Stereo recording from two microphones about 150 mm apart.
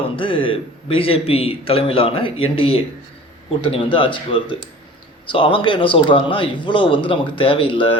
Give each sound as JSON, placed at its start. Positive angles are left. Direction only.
{"t": 0.2, "sound": "speech", "side_deg": 35}